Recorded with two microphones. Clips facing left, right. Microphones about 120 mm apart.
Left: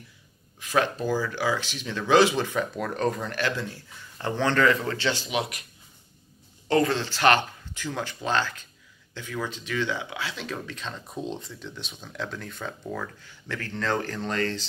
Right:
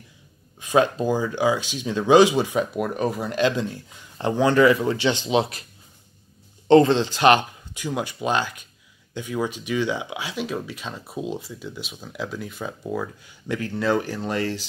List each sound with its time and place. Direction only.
0.6 s speech: 20° right (ahead or behind)
6.7 s speech: 25° right (ahead or behind)